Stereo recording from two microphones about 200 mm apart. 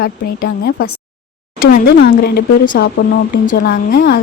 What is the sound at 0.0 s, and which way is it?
Speech, 50° left (ahead or behind).